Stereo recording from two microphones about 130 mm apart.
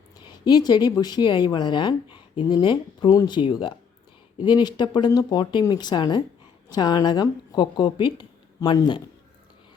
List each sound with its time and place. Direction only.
0.3 s speech: 35° left (ahead or behind)